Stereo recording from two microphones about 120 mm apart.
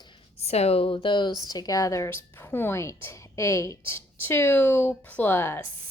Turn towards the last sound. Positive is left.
turn(degrees=20)  # may be behind; listen again after turning